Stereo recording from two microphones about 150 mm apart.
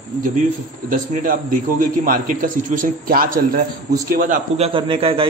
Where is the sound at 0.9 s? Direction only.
65° right (ahead or behind).